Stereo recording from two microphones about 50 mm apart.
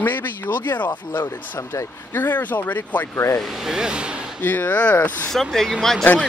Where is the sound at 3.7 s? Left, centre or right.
Centre.